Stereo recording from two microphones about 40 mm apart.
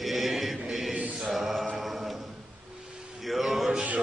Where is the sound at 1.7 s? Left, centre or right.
Centre.